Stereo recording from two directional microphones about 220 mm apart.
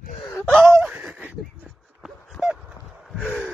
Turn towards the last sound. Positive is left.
turn(degrees=-5)  # may be behind; listen again after turning